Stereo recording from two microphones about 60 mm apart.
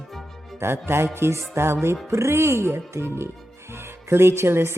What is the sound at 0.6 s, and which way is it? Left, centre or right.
A woman's voice, right.